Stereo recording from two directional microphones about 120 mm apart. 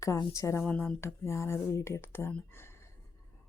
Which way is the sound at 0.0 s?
25° left (ahead or behind).